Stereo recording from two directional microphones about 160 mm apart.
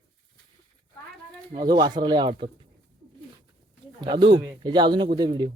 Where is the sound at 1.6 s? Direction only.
25° right (ahead or behind).